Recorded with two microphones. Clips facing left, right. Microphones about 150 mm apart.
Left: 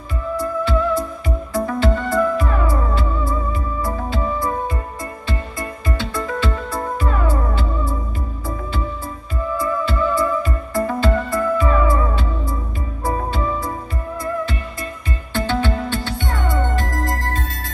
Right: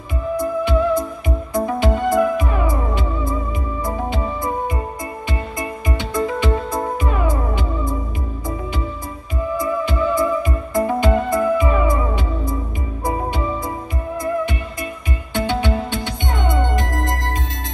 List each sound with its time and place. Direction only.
0.4 s music: 15° right (ahead or behind)
5.6 s music: 15° right (ahead or behind)
9.6 s music: 15° right (ahead or behind)
15.3 s music: 15° right (ahead or behind)